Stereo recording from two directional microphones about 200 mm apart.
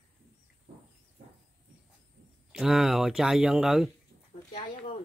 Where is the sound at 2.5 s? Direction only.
Centre (ahead or behind).